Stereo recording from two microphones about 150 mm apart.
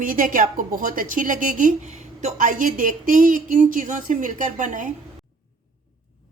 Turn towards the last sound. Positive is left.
turn(degrees=-60)  # may be behind; listen again after turning